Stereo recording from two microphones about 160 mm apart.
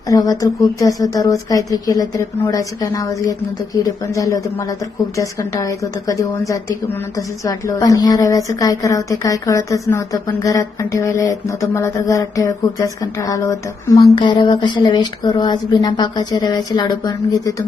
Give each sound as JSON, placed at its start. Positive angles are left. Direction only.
{"t": 0.1, "sound": "a woman's voice", "side_deg": 20}